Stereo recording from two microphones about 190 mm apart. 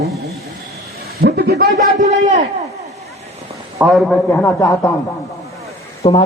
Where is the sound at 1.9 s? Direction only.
40° right (ahead or behind).